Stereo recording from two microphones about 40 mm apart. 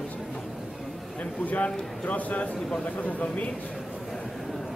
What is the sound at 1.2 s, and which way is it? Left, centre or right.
A man's voice, left.